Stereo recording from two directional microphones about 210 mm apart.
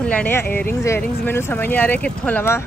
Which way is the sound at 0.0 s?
5° left (ahead or behind).